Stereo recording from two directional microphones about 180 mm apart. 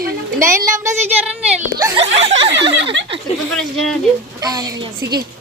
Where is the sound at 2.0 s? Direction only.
35° right (ahead or behind).